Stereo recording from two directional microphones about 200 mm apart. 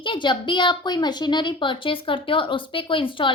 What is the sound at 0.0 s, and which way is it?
A woman's voice, 25° left (ahead or behind).